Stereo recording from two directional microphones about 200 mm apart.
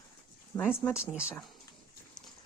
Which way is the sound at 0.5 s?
20° left (ahead or behind).